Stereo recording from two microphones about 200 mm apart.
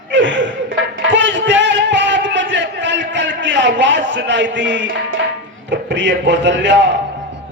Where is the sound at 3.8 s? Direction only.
65° right (ahead or behind).